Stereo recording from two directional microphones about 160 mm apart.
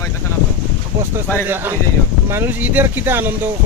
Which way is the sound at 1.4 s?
15° right (ahead or behind).